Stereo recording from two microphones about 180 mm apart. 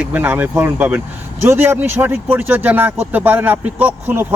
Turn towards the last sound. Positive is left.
turn(degrees=-10)  # may be behind; listen again after turning